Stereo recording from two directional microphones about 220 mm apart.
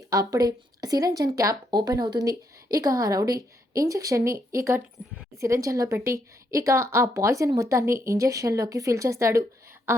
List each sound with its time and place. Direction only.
0.1 s speech: 15° right (ahead or behind)